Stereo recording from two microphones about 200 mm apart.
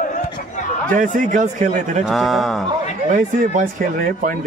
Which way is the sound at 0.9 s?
40° right (ahead or behind).